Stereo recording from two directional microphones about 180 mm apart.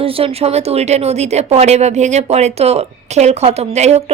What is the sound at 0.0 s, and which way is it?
Speech, 35° right (ahead or behind).